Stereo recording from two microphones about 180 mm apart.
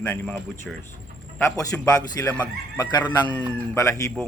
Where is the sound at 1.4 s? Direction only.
15° left (ahead or behind).